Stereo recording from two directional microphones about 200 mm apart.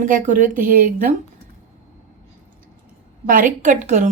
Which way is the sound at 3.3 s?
40° right (ahead or behind).